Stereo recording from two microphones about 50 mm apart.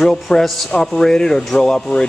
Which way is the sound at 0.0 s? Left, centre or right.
Centre.